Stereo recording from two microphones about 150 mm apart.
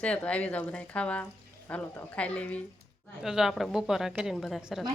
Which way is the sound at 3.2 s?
Centre (ahead or behind).